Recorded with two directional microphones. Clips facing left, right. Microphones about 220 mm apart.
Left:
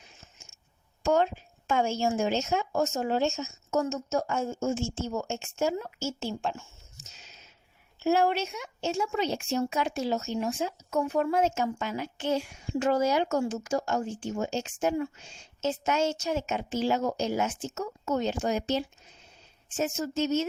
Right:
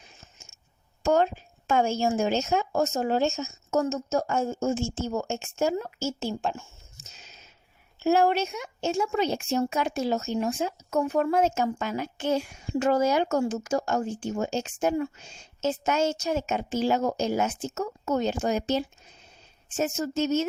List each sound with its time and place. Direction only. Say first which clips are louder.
1.0 s a woman's voice: right 2 dB; 40° right (ahead or behind)
8.0 s a woman's voice: right 3 dB; 45° right (ahead or behind)